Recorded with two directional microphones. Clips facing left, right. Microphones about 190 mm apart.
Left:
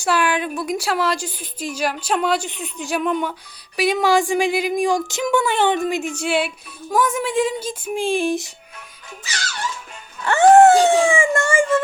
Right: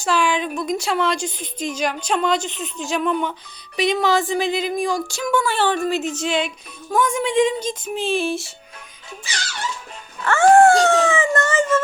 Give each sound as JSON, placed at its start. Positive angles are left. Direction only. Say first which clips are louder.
{"t": 0.0, "sound": "a woman's voice", "louder": "even", "side_deg": 10}
{"t": 10.2, "sound": "a woman's voice", "louder": "left 2 dB", "side_deg": 20}